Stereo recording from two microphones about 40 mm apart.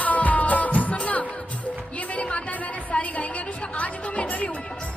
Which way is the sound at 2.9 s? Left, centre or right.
Left.